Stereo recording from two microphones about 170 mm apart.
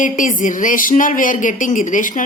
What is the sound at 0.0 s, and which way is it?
Speech, 50° left (ahead or behind).